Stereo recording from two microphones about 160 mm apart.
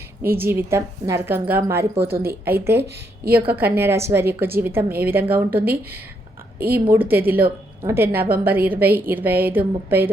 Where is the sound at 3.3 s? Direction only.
70° right (ahead or behind).